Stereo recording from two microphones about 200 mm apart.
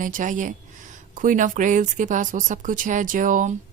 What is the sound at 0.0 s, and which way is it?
Speech, 40° right (ahead or behind).